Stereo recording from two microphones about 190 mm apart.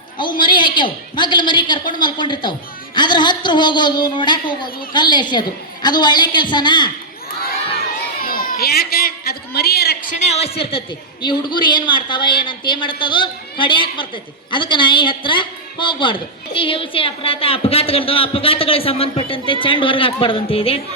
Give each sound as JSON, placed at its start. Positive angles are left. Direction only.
{"t": 0.2, "sound": "a woman's voice", "side_deg": 25}
{"t": 7.4, "sound": "crowd", "side_deg": 50}
{"t": 10.2, "sound": "a woman's voice", "side_deg": 35}